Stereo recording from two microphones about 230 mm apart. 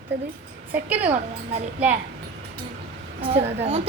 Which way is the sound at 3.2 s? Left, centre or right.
Right.